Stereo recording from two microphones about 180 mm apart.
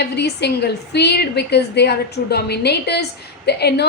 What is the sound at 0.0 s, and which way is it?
A woman's voice, 70° left (ahead or behind).